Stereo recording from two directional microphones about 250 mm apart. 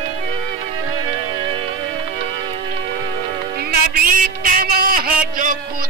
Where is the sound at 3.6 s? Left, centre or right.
Right.